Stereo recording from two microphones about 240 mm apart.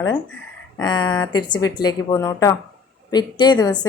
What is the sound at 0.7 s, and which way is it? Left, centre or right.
A woman's voice, centre.